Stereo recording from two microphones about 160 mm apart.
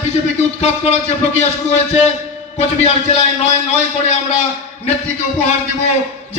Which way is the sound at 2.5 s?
45° left (ahead or behind).